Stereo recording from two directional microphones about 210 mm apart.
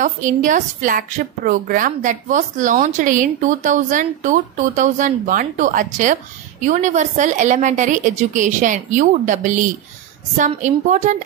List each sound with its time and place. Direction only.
0.0 s a woman's voice: 35° right (ahead or behind)